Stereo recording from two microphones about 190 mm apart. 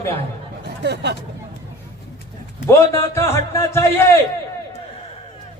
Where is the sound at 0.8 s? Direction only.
60° right (ahead or behind).